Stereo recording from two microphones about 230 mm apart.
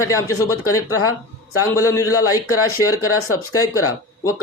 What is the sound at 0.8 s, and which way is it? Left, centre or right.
Speech, left.